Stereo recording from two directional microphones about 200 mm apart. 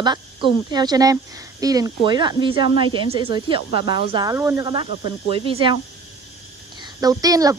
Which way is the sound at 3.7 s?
55° left (ahead or behind).